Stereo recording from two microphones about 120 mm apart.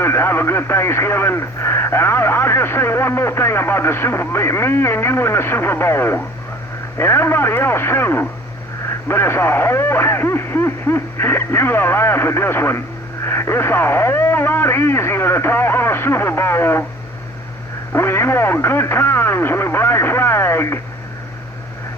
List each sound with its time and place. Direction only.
0.0 s speech: 20° left (ahead or behind)
17.9 s speech: 20° left (ahead or behind)